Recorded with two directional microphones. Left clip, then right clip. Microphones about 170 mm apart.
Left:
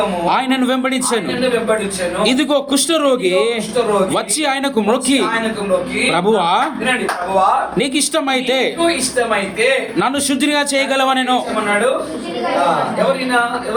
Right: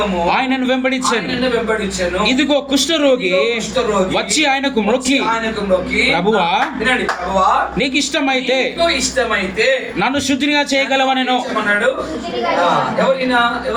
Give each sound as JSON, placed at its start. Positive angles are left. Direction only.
{"t": 0.3, "sound": "a man's voice", "side_deg": 30}
{"t": 2.2, "sound": "a man's voice", "side_deg": 35}
{"t": 7.8, "sound": "a man's voice", "side_deg": 35}
{"t": 10.0, "sound": "a man's voice", "side_deg": 30}